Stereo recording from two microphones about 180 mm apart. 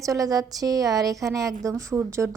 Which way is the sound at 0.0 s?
20° right (ahead or behind).